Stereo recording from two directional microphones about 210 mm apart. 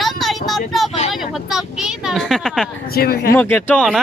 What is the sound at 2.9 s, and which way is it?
Speech, 45° left (ahead or behind).